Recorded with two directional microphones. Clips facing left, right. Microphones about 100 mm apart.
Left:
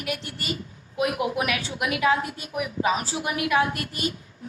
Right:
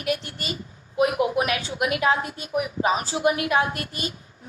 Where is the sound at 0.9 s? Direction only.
30° right (ahead or behind).